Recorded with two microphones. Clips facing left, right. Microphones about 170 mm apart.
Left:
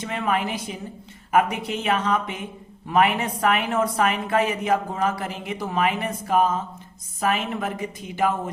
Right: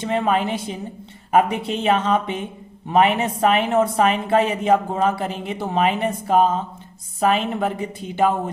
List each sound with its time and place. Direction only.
0.0 s speech: 30° right (ahead or behind)